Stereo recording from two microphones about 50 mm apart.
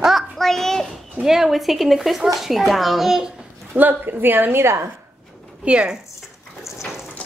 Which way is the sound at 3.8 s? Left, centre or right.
Right.